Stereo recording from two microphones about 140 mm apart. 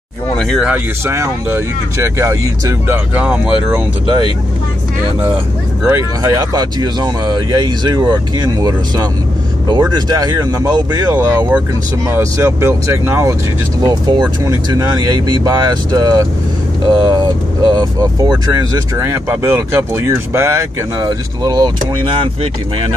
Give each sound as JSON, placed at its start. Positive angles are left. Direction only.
{"t": 0.4, "sound": "speech", "side_deg": 5}
{"t": 0.7, "sound": "speech", "side_deg": -20}
{"t": 5.9, "sound": "speech", "side_deg": -25}
{"t": 13.8, "sound": "speech", "side_deg": -30}